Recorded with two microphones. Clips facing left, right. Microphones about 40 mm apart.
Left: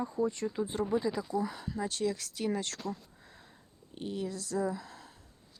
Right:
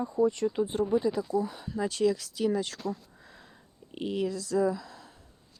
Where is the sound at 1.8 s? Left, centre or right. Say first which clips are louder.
Right 6 dB; right.